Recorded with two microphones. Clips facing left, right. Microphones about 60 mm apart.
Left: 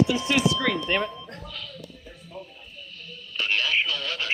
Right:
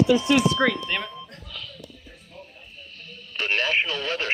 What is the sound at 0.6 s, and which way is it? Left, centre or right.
Speech, right.